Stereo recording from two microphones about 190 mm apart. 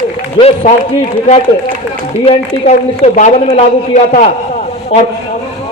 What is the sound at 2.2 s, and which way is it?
A man's voice, 35° left (ahead or behind).